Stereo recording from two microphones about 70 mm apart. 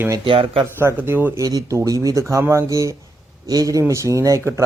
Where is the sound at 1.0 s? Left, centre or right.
Right.